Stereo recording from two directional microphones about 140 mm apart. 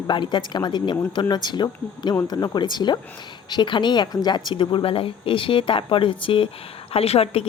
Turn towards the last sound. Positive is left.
turn(degrees=45)  # may be behind; listen again after turning